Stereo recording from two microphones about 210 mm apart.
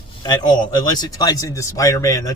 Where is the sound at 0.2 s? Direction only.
20° left (ahead or behind).